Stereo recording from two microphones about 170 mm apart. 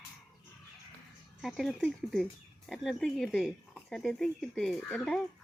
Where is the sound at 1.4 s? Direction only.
Centre (ahead or behind).